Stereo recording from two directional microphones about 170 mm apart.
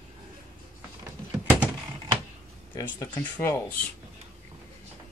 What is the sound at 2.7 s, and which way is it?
Speech, 25° left (ahead or behind).